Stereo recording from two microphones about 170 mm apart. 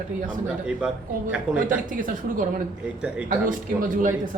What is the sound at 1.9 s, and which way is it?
Speech, 55° right (ahead or behind).